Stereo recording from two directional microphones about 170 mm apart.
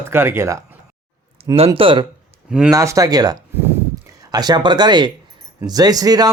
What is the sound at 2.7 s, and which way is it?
Speech, 20° right (ahead or behind).